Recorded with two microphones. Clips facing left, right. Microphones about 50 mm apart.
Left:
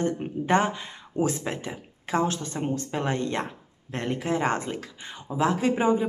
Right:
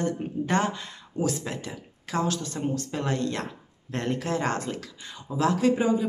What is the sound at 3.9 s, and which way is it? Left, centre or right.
Speech, centre.